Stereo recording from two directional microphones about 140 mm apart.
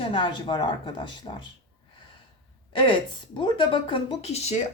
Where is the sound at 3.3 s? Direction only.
35° left (ahead or behind); by 4.6 s 50° left (ahead or behind).